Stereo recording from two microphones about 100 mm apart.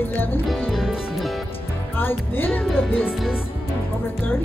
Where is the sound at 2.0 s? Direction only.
20° left (ahead or behind).